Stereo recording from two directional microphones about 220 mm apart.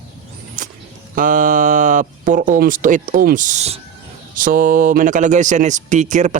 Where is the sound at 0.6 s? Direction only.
35° right (ahead or behind).